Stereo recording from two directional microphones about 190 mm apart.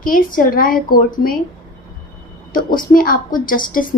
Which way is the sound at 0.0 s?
45° left (ahead or behind).